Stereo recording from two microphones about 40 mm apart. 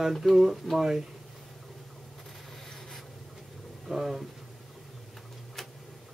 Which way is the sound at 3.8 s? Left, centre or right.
Centre.